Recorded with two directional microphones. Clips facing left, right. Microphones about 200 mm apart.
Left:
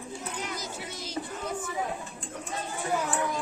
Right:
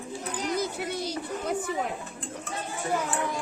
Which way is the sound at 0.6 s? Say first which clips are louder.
Right 8 dB; 60° right (ahead or behind).